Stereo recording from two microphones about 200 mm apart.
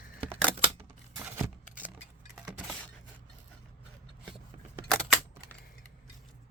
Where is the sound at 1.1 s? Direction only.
10° right (ahead or behind).